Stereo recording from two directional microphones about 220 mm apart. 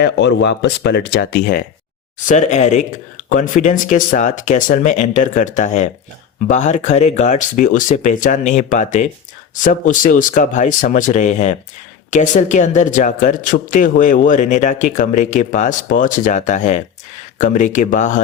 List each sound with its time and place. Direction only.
0.0 s speech: 50° left (ahead or behind)
2.1 s speech: 35° left (ahead or behind)